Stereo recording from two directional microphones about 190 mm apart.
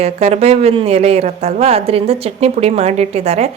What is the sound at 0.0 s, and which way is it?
Speech, 35° right (ahead or behind).